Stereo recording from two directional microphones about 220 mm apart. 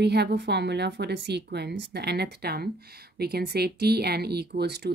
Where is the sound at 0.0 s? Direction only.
50° right (ahead or behind).